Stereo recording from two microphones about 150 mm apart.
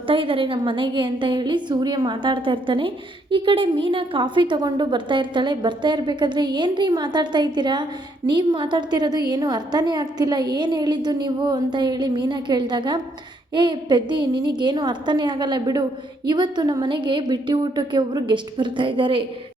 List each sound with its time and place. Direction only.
0.1 s a woman's voice: 35° right (ahead or behind)